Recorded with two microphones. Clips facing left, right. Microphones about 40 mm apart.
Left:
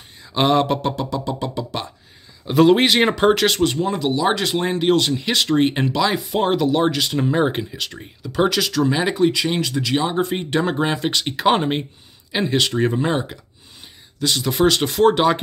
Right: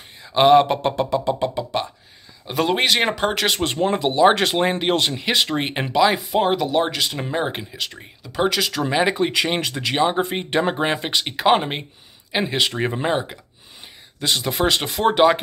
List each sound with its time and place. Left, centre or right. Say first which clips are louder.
0.2 s speech: right 4 dB; centre
0.8 s speech: right 3 dB; right
2.4 s speech: left 6 dB; centre
3.6 s speech: left 1 dB; right; by 8.7 s centre
8.7 s speech: left 1 dB; right
9.3 s speech: left 1 dB; right; by 15.3 s centre